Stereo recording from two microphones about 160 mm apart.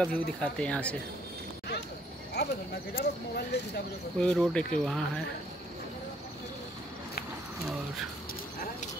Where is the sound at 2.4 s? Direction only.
90° left.